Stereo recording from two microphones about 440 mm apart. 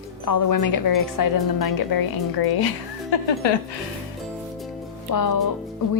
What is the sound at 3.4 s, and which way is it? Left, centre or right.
Speech, left.